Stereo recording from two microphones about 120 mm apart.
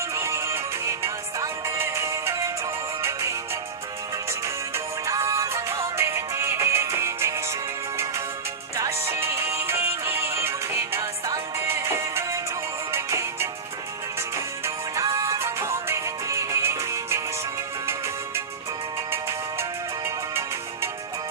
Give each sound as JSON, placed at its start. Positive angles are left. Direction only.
{"t": 0.1, "sound": "music", "side_deg": -25}
{"t": 8.7, "sound": "music", "side_deg": -25}